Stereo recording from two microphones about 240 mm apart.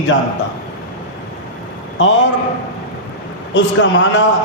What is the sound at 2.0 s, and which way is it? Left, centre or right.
Speech, left.